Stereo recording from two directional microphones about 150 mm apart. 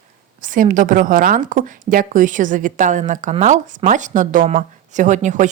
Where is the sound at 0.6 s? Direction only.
60° right (ahead or behind).